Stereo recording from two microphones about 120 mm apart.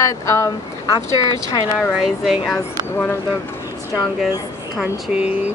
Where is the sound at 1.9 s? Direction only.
5° right (ahead or behind).